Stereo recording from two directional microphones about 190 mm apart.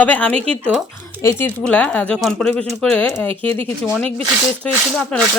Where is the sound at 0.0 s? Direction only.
10° left (ahead or behind).